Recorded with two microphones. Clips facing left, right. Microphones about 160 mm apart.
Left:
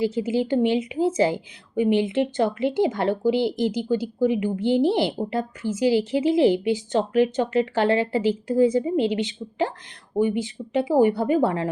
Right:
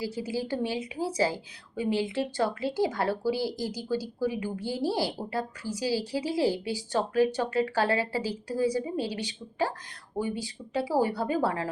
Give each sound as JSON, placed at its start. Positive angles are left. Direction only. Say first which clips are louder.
{"t": 0.0, "sound": "a woman's voice", "louder": "left 9 dB", "side_deg": 20}